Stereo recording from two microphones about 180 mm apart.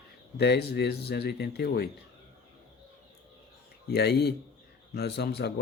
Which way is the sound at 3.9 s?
65° left (ahead or behind).